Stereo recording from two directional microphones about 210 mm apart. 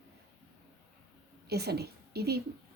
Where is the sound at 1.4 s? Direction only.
50° right (ahead or behind).